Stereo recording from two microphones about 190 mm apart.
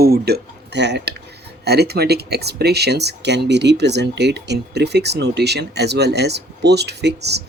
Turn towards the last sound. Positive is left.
turn(degrees=-60)  # may be behind; listen again after turning